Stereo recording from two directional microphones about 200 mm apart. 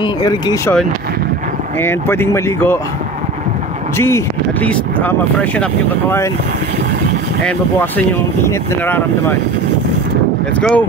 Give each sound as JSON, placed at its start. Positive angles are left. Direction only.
{"t": 0.0, "sound": "speech", "side_deg": 20}
{"t": 1.8, "sound": "speech", "side_deg": 10}
{"t": 4.0, "sound": "speech", "side_deg": 10}
{"t": 8.5, "sound": "speech", "side_deg": 10}
{"t": 10.6, "sound": "speech", "side_deg": 5}